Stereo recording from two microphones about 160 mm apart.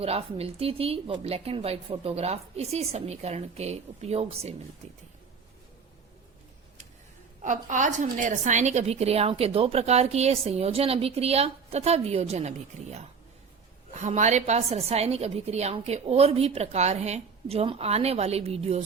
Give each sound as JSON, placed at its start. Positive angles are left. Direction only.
{"t": 0.0, "sound": "a woman's voice", "side_deg": -40}
{"t": 7.4, "sound": "a woman's voice", "side_deg": -50}